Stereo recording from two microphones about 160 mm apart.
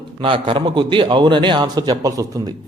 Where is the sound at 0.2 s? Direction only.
35° right (ahead or behind).